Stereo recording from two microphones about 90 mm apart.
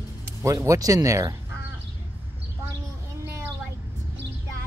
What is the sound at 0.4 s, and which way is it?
Speech, 35° right (ahead or behind).